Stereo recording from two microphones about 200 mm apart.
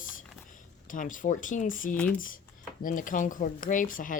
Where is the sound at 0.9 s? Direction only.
40° left (ahead or behind).